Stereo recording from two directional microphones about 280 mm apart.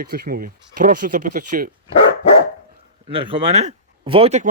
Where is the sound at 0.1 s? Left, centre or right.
Right.